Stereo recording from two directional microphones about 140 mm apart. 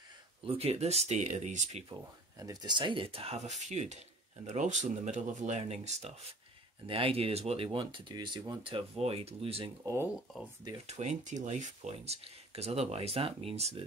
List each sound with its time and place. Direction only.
0.5 s speech: 45° right (ahead or behind)
1.9 s speech: 25° right (ahead or behind); by 6.1 s 50° right (ahead or behind)
6.9 s speech: 40° right (ahead or behind)
10.9 s speech: 55° right (ahead or behind)